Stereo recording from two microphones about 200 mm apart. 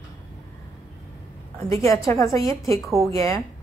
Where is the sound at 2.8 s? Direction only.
Centre (ahead or behind).